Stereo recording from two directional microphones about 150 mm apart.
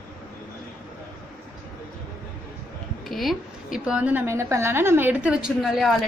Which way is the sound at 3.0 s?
Centre (ahead or behind).